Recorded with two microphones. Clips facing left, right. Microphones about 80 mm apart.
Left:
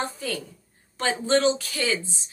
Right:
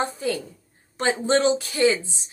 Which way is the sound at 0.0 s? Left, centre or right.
Right.